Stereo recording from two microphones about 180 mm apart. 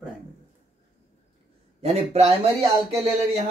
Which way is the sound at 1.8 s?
35° right (ahead or behind).